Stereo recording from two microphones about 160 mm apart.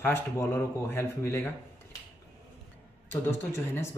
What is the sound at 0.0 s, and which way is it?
Speech, 15° left (ahead or behind).